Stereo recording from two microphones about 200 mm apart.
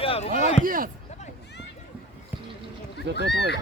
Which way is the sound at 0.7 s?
45° right (ahead or behind).